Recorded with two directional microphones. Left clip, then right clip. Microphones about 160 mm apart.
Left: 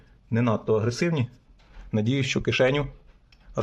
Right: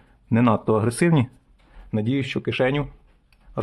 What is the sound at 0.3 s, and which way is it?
Speech, 30° right (ahead or behind).